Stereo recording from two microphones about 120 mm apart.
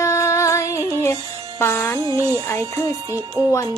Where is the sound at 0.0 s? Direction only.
25° left (ahead or behind).